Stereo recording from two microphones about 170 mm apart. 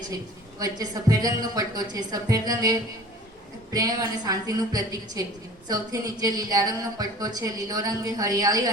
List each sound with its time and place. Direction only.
0.6 s a woman's voice: 20° right (ahead or behind)